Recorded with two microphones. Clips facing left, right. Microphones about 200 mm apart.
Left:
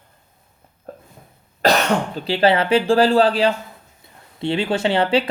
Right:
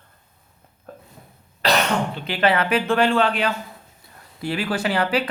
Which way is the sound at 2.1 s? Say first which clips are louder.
Left 5 dB; 30° left (ahead or behind).